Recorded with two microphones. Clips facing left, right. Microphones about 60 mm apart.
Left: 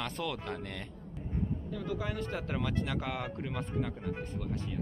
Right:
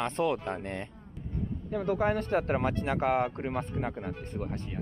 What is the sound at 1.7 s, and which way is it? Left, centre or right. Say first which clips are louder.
Speech: right 8 dB; right.